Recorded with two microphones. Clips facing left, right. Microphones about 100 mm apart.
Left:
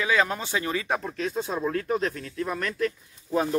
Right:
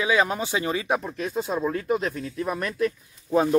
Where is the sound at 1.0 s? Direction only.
10° right (ahead or behind).